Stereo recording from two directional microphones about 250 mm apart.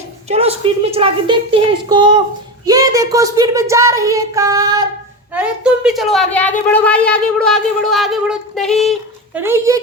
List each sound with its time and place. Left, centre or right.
0.3 s a woman's voice: right
5.3 s a woman's voice: centre